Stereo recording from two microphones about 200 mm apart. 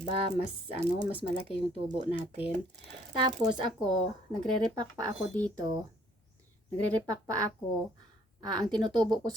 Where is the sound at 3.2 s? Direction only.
25° right (ahead or behind).